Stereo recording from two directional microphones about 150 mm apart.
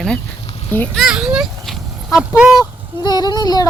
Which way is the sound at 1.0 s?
5° right (ahead or behind).